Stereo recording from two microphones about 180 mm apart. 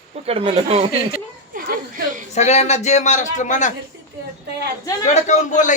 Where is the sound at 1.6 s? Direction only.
50° right (ahead or behind).